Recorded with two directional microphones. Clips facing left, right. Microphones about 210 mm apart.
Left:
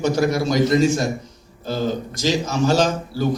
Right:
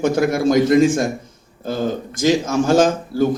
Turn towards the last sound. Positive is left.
turn(degrees=-50)  # may be behind; listen again after turning